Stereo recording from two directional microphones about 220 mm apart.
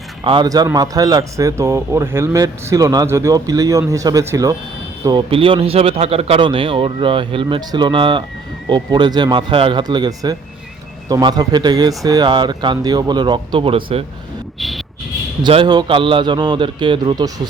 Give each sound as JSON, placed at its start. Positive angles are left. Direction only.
{"t": 0.3, "sound": "a man's voice", "side_deg": -20}
{"t": 15.4, "sound": "a man's voice", "side_deg": -20}